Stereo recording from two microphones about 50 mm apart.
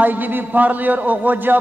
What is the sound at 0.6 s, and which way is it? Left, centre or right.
A man's voice, right.